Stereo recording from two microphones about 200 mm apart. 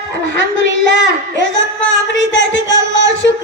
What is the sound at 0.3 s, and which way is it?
Child singing, 65° left (ahead or behind).